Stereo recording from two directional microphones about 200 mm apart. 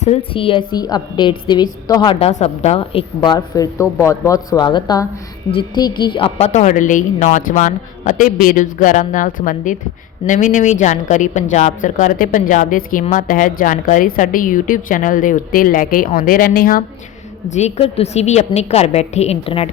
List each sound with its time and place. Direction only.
0.0 s a woman's voice: 30° left (ahead or behind); by 16.8 s 45° left (ahead or behind)
17.5 s speech: 30° left (ahead or behind)